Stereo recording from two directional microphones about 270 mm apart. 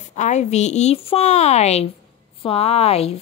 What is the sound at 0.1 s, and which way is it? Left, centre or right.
A woman's voice, left.